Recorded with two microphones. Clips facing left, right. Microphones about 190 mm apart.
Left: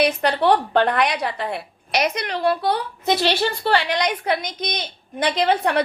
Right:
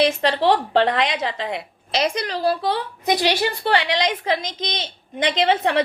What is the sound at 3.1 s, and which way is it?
A woman's voice, 15° right (ahead or behind).